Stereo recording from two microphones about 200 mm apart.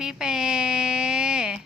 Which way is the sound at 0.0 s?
5° right (ahead or behind).